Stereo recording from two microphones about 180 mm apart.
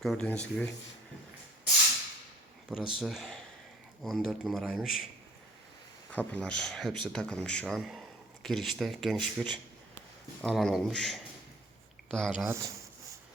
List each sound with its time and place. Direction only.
0.0 s speech: 5° left (ahead or behind)
2.6 s speech: 5° right (ahead or behind)
6.1 s speech: 10° left (ahead or behind)
12.5 s speech: 15° right (ahead or behind)